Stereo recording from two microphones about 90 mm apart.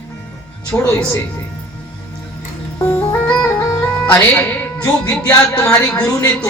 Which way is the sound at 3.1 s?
35° left (ahead or behind).